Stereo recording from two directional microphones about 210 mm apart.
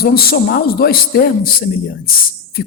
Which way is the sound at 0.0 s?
45° left (ahead or behind).